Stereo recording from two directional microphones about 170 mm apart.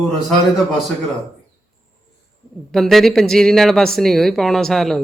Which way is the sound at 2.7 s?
Centre (ahead or behind).